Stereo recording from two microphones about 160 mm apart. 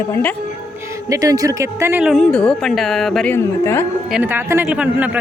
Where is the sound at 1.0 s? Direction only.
20° right (ahead or behind).